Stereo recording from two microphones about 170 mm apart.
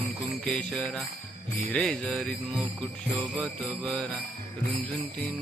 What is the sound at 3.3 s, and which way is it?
Speech, 5° left (ahead or behind).